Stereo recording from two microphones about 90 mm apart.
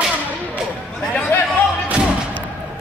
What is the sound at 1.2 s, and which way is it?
Chatter, 20° left (ahead or behind).